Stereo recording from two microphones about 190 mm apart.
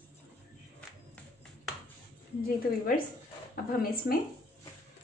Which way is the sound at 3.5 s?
50° left (ahead or behind).